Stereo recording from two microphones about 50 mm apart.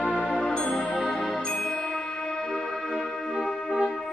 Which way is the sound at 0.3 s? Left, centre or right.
Centre.